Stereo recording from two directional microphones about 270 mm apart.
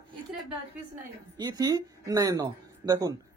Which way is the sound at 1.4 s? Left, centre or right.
Centre.